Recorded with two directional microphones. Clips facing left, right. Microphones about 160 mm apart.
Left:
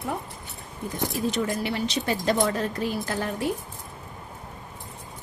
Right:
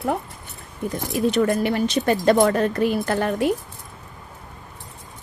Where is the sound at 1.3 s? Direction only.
60° right (ahead or behind).